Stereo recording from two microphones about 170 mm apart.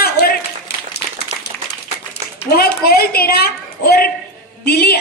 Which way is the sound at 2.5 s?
65° left (ahead or behind).